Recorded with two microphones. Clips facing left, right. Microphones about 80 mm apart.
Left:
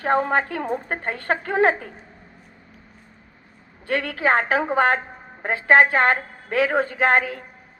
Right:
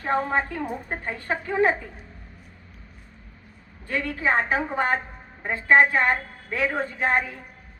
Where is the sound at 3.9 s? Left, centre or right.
Left.